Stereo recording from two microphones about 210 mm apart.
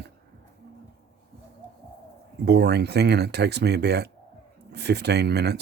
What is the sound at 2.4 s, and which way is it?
Speech, 55° right (ahead or behind).